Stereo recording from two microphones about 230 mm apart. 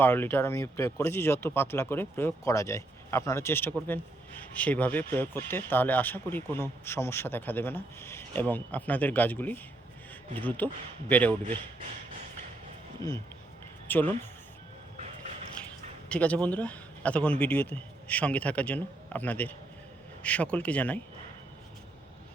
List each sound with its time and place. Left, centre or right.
0.0 s speech: centre
10.6 s speech: centre
13.9 s speech: centre
15.6 s a sound: centre
16.0 s speech: centre